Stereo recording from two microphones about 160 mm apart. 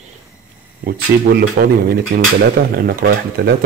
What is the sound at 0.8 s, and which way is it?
Speech, 70° right (ahead or behind).